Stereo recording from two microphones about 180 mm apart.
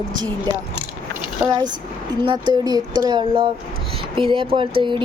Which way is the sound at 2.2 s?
25° right (ahead or behind).